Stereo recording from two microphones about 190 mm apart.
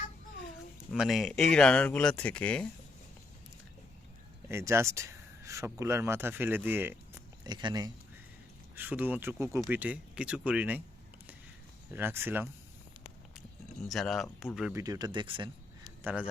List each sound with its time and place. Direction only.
0.9 s speech: centre (ahead or behind)
4.4 s speech: 15° right (ahead or behind)
8.7 s speech: 10° right (ahead or behind)
11.9 s speech: 10° right (ahead or behind)
13.8 s speech: centre (ahead or behind)
14.7 s speech: 15° right (ahead or behind)
16.0 s speech: 5° right (ahead or behind)